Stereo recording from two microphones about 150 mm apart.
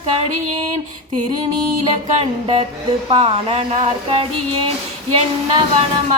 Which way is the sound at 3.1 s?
40° right (ahead or behind).